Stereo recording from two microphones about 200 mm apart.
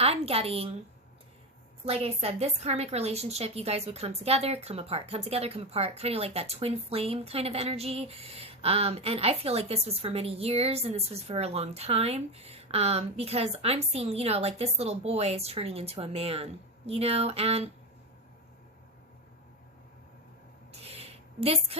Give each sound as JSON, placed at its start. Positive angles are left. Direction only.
{"t": 0.0, "sound": "a woman's voice", "side_deg": -30}
{"t": 1.8, "sound": "a woman's voice", "side_deg": -30}
{"t": 20.8, "sound": "a sound", "side_deg": -30}